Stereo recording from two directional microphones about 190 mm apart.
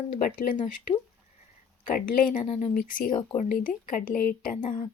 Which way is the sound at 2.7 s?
45° left (ahead or behind).